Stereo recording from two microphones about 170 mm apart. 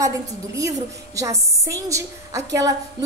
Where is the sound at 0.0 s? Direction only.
20° right (ahead or behind).